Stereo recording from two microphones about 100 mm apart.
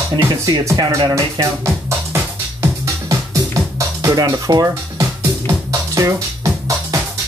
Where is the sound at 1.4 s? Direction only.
30° right (ahead or behind).